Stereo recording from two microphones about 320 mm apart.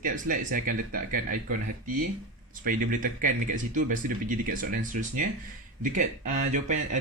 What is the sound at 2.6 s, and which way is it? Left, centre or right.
Speech, right.